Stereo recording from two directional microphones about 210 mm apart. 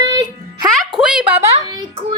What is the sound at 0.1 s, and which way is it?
Music, 20° right (ahead or behind).